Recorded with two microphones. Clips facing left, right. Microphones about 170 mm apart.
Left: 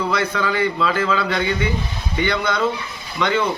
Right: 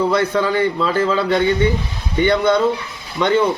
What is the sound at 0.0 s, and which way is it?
A man's voice, 30° right (ahead or behind).